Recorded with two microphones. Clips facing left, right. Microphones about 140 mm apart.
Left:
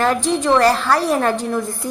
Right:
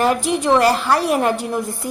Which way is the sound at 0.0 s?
10° right (ahead or behind).